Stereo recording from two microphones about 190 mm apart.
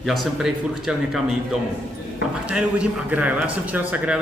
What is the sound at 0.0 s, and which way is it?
A man's voice, centre (ahead or behind).